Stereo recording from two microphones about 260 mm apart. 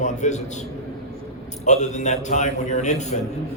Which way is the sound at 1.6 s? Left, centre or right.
Left.